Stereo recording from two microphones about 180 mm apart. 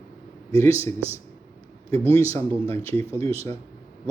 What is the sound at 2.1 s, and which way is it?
Speech, 15° left (ahead or behind).